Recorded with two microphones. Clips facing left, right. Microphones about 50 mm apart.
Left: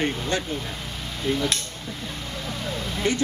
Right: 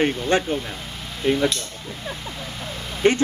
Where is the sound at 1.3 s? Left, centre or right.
Right.